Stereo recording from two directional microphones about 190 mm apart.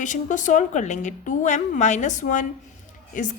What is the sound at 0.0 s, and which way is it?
Speech, 40° left (ahead or behind).